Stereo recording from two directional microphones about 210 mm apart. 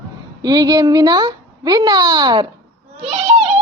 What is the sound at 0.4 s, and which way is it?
A child's voice, 20° right (ahead or behind).